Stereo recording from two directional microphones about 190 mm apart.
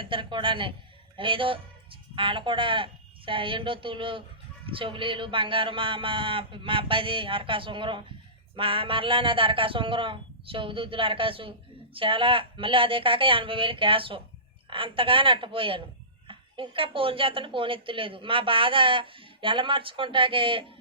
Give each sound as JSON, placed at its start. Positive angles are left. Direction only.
{"t": 0.0, "sound": "speech", "side_deg": -25}